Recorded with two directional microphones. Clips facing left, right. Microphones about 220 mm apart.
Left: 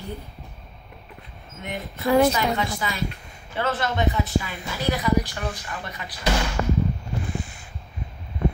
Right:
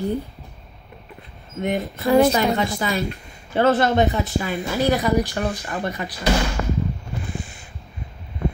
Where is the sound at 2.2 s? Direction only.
40° right (ahead or behind).